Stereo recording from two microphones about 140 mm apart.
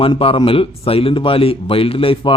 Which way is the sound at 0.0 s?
40° left (ahead or behind).